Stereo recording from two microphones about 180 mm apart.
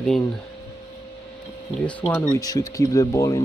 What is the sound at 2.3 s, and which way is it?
Speech, 20° left (ahead or behind).